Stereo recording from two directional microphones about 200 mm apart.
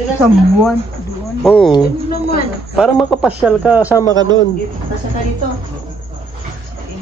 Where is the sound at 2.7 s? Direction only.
Centre (ahead or behind).